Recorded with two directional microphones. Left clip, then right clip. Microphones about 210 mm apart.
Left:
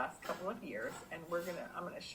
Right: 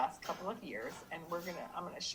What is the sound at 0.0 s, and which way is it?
Speech, 35° right (ahead or behind).